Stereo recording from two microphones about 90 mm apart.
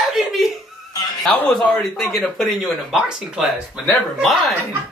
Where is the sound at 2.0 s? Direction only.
Centre (ahead or behind).